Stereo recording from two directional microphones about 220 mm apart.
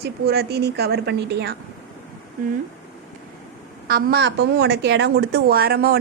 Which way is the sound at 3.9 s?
40° right (ahead or behind).